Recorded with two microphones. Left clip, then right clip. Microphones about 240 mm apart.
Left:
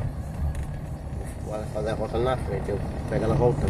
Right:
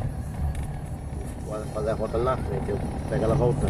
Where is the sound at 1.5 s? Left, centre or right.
Left.